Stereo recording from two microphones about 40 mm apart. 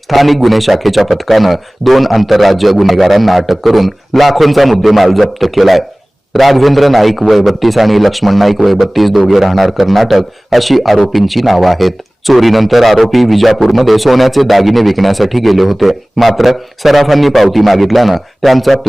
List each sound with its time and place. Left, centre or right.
0.1 s a man's voice: centre